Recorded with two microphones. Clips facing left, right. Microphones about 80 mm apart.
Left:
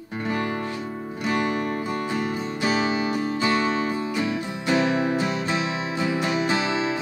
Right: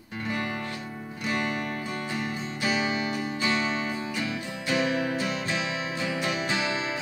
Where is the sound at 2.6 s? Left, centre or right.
Left.